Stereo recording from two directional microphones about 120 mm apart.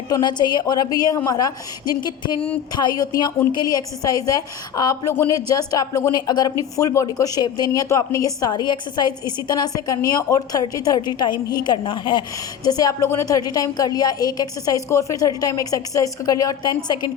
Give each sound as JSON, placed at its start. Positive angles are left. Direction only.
{"t": 0.1, "sound": "speech", "side_deg": 35}